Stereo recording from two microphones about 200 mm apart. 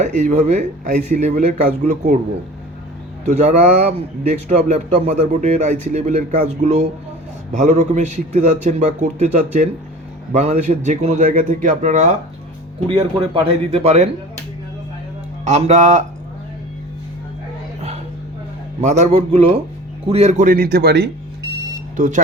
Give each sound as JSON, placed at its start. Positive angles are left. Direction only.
{"t": 0.0, "sound": "a man's voice", "side_deg": -35}
{"t": 3.2, "sound": "a man's voice", "side_deg": -35}
{"t": 15.4, "sound": "a man's voice", "side_deg": -35}
{"t": 18.8, "sound": "a man's voice", "side_deg": -35}
{"t": 21.9, "sound": "speech", "side_deg": -40}